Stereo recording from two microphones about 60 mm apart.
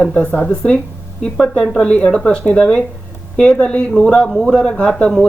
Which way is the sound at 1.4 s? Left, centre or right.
Centre.